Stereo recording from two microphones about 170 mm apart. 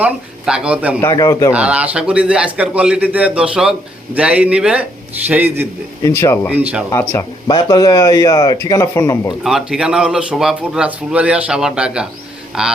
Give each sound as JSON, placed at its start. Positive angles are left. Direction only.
{"t": 0.0, "sound": "a man's voice", "side_deg": -5}
{"t": 1.0, "sound": "speech", "side_deg": 20}
{"t": 1.5, "sound": "a man's voice", "side_deg": -5}
{"t": 6.0, "sound": "speech", "side_deg": 15}
{"t": 6.5, "sound": "a man's voice", "side_deg": -10}
{"t": 6.9, "sound": "speech", "side_deg": 15}
{"t": 7.4, "sound": "speech", "side_deg": 25}
{"t": 9.4, "sound": "speech", "side_deg": -5}